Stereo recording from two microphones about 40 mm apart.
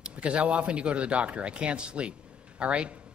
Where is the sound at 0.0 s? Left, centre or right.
Right.